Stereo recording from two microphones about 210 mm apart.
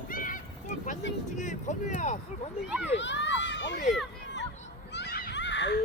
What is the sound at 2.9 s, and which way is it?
Run, 60° left (ahead or behind).